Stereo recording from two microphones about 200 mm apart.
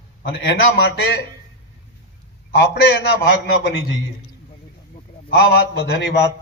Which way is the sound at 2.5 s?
60° left (ahead or behind).